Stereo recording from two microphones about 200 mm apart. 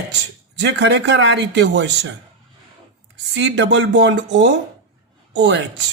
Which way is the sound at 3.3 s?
60° right (ahead or behind).